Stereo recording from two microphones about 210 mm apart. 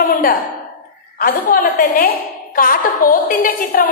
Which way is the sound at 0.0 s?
40° left (ahead or behind).